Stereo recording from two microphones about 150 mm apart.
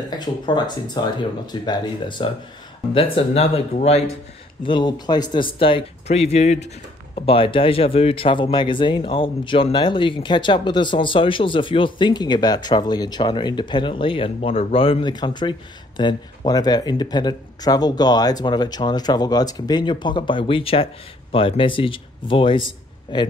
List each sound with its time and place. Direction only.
0.2 s speech: 30° left (ahead or behind); by 4.0 s 45° left (ahead or behind)
4.6 s speech: 30° left (ahead or behind)